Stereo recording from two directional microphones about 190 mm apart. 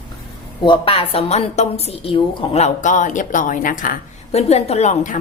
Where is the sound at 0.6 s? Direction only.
25° left (ahead or behind).